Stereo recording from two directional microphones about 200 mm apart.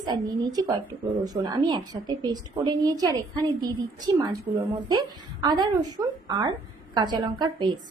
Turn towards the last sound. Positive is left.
turn(degrees=-20)  # may be behind; listen again after turning